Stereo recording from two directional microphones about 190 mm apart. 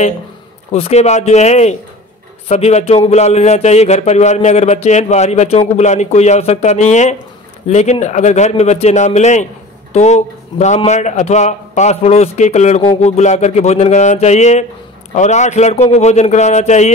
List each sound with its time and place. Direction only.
0.7 s a man's voice: 30° left (ahead or behind)